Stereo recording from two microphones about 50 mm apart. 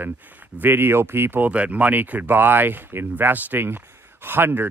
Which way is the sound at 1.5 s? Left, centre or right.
Right.